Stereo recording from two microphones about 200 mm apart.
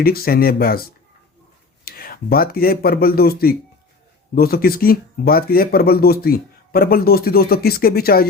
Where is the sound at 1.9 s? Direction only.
50° left (ahead or behind).